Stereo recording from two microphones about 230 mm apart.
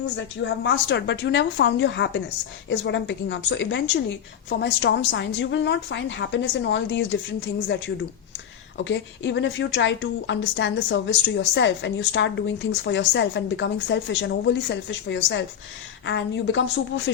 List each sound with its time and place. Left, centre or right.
0.4 s a woman's voice: left
8.8 s a woman's voice: left